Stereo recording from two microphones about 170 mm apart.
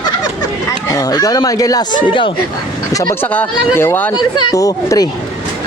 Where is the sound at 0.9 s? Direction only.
20° left (ahead or behind).